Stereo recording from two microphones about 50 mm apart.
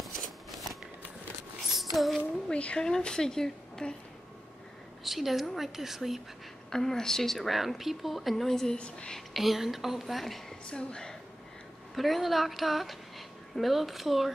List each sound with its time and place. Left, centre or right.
0.0 s shuffling cards: centre
1.8 s speech: centre
2.5 s a woman's voice: left
5.0 s speech: centre
6.7 s speech: centre
8.7 s a woman's voice: centre
9.3 s speech: centre
10.7 s a woman's voice: centre
11.9 s speech: centre